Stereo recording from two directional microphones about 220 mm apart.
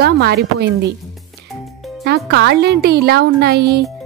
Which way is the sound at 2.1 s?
50° right (ahead or behind).